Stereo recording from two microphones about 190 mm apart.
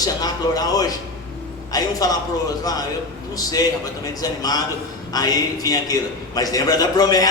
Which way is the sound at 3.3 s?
20° left (ahead or behind).